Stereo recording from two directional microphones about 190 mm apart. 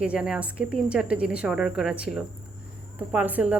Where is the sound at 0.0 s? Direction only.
5° right (ahead or behind).